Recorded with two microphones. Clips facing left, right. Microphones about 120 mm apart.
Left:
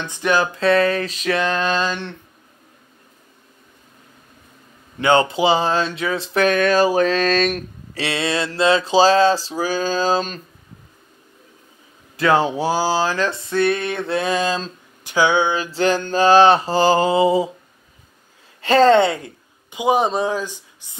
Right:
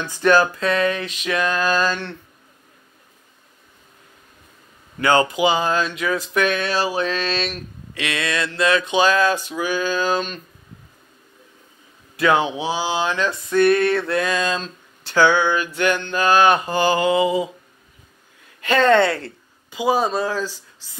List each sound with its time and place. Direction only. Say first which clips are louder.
0.0 s speech: right 3 dB; 20° left (ahead or behind)
0.6 s speech: left 4 dB; 35° left (ahead or behind)
4.9 s speech: left 1 dB; 25° left (ahead or behind); by 8.0 s 45° left (ahead or behind)
8.0 s speech: left 2 dB; 30° left (ahead or behind)
12.2 s speech: left 1 dB; 35° left (ahead or behind)
15.0 s speech: right 1 dB; 15° left (ahead or behind); by 17.5 s 30° left (ahead or behind)
18.6 s speech: left 3 dB; 30° left (ahead or behind)
18.9 s speech: left 1 dB; 15° left (ahead or behind)